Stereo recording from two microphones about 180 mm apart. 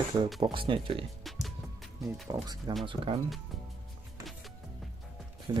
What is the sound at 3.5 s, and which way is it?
Music, centre (ahead or behind).